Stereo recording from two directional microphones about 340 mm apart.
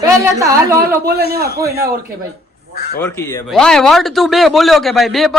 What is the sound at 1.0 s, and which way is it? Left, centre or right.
Speech, right.